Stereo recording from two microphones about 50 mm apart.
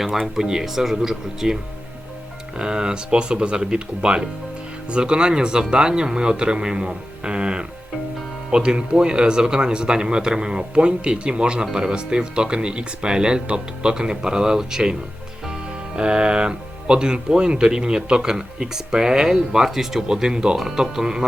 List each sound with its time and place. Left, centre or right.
0.3 s speech: centre
2.6 s speech: centre
16.0 s speech: centre